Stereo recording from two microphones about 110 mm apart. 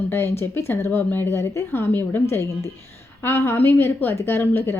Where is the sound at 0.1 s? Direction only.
20° left (ahead or behind).